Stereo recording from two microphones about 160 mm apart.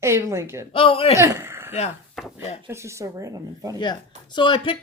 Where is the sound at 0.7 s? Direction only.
35° left (ahead or behind).